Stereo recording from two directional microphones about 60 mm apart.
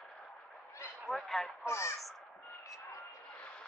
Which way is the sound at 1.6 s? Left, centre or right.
Left.